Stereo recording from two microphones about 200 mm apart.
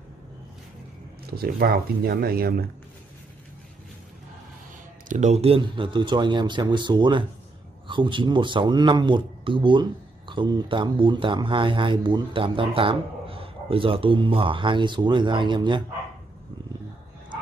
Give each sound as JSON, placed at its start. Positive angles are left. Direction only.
{"t": 1.3, "sound": "speech", "side_deg": -50}
{"t": 5.0, "sound": "speech", "side_deg": -35}